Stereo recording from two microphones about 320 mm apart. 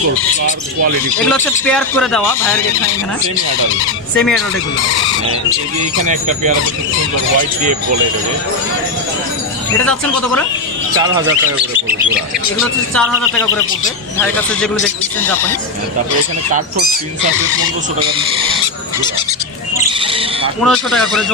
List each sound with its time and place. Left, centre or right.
1.2 s speech: centre
4.1 s speech: centre
6.0 s speech: right
11.0 s speech: centre
14.1 s speech: centre
16.5 s speech: right
19.9 s owl: centre
20.6 s speech: centre